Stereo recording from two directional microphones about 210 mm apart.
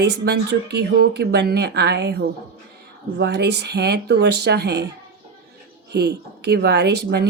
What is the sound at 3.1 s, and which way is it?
A woman's voice, 55° right (ahead or behind).